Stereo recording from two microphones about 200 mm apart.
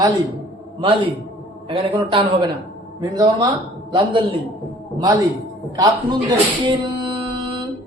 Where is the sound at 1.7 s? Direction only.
25° right (ahead or behind).